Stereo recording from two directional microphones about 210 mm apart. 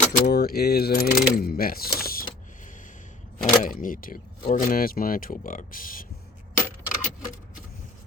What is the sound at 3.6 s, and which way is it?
Speech, 40° left (ahead or behind).